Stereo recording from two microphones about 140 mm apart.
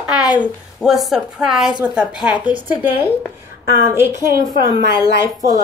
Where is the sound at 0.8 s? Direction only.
Centre (ahead or behind).